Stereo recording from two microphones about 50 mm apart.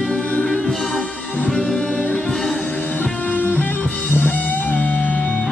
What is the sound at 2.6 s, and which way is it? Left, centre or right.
Music, left.